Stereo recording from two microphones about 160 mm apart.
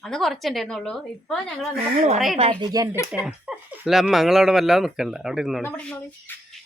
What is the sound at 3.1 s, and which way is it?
Speech, 5° right (ahead or behind).